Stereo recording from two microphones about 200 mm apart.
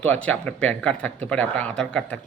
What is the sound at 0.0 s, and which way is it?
Speech, 10° left (ahead or behind).